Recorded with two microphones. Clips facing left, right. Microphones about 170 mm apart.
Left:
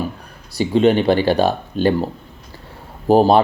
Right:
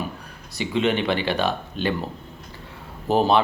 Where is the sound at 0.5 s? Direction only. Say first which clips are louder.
Left 8 dB; 40° left (ahead or behind).